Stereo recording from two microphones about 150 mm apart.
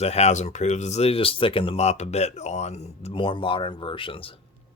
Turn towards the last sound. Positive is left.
turn(degrees=35)  # may be behind; listen again after turning